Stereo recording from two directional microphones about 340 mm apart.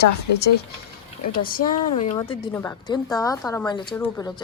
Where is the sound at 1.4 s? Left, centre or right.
Left.